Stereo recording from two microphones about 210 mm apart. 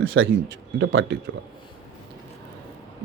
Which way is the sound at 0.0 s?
70° right (ahead or behind).